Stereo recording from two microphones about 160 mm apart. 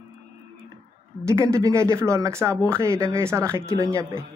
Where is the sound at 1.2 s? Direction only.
20° right (ahead or behind).